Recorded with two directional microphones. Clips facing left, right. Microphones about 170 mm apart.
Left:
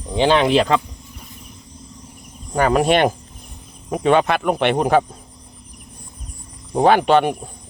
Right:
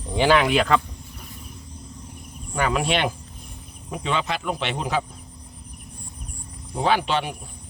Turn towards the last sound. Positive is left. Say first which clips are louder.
# left 8 dB
turn(degrees=50)  # may be behind; listen again after turning